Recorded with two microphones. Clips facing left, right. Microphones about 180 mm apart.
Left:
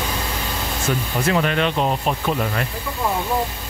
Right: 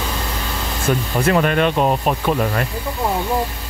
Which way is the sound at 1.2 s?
50° right (ahead or behind).